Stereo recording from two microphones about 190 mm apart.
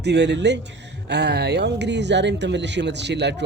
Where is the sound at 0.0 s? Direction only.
60° right (ahead or behind).